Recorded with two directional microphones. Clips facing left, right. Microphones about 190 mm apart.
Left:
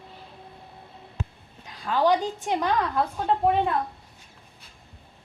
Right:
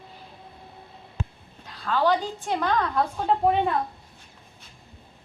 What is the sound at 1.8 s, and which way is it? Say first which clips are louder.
Speech: left 1 dB; 15° left (ahead or behind).